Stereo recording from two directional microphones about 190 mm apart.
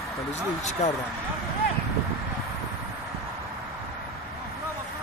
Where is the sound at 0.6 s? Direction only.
35° left (ahead or behind).